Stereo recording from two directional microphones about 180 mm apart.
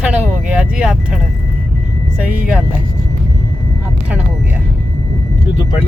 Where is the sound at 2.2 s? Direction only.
5° right (ahead or behind).